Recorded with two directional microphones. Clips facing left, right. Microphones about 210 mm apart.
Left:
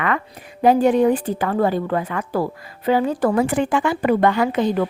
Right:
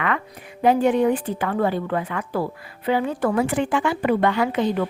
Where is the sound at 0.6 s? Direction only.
35° left (ahead or behind).